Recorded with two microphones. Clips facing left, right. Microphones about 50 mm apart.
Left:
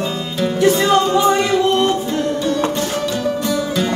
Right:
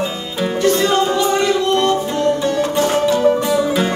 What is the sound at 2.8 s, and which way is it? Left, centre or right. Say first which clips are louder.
Music: right 6 dB; right.